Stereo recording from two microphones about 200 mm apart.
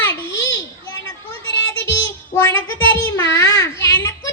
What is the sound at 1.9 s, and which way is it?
Child singing, 15° left (ahead or behind).